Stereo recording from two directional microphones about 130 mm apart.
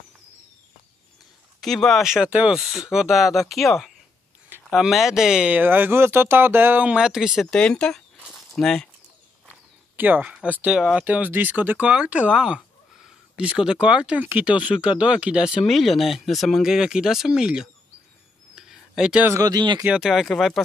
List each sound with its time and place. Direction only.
1.6 s speech: 5° left (ahead or behind)
7.5 s speech: 5° left (ahead or behind)
8.2 s a sound: centre (ahead or behind)
9.5 s speech: 15° right (ahead or behind)
18.5 s a sound: 5° right (ahead or behind)
19.3 s speech: 30° right (ahead or behind)
19.8 s speech: 5° right (ahead or behind)